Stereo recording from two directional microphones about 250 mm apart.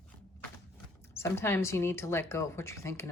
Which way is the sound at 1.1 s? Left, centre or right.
Centre.